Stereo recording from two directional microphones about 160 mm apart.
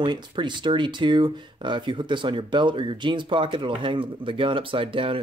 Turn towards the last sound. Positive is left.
turn(degrees=-35)  # may be behind; listen again after turning